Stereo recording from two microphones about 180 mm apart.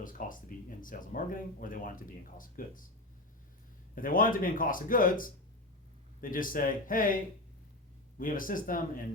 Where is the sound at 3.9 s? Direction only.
50° left (ahead or behind).